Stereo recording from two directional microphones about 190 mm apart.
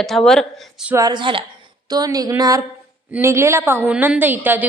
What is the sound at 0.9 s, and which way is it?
A woman's voice, 20° right (ahead or behind).